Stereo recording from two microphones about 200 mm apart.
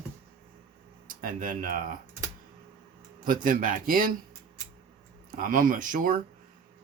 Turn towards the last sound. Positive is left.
turn(degrees=-40)  # may be behind; listen again after turning